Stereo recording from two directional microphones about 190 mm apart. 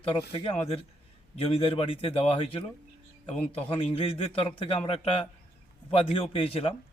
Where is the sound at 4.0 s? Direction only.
30° left (ahead or behind).